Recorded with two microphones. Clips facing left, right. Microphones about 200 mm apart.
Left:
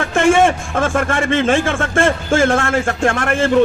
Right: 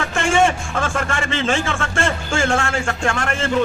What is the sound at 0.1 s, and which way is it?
Music, 55° left (ahead or behind).